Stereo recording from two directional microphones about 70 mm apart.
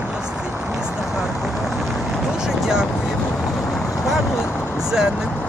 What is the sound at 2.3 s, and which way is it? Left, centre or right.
Speech, centre.